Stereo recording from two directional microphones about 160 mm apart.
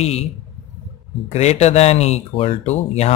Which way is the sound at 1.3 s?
40° left (ahead or behind).